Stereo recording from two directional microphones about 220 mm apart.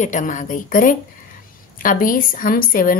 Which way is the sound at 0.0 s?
35° left (ahead or behind).